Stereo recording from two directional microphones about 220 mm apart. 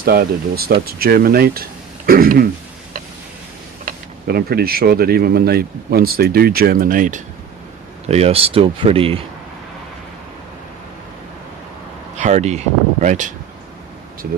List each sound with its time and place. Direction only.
0.0 s speech: 45° right (ahead or behind)
2.0 s throat clearing: 40° right (ahead or behind)
3.8 s speech: 45° right (ahead or behind); by 9.2 s 25° right (ahead or behind)
12.1 s speech: 35° right (ahead or behind)